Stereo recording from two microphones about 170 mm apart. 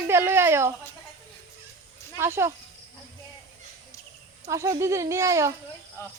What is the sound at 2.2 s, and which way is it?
Speech, 15° right (ahead or behind).